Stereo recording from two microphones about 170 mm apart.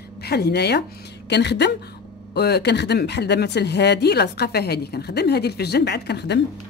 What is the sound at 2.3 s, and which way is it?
A woman's voice, 70° left (ahead or behind).